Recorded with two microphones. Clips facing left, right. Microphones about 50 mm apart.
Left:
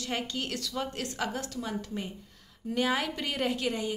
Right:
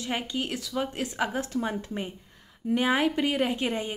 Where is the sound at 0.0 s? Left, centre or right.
Centre.